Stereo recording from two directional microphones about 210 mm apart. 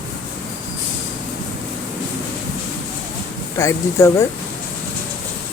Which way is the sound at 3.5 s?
15° left (ahead or behind).